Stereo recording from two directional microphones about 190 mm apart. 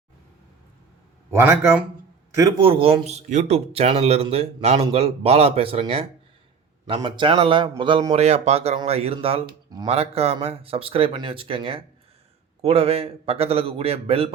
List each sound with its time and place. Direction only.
1.3 s speech: 10° right (ahead or behind)
2.6 s speech: 30° right (ahead or behind)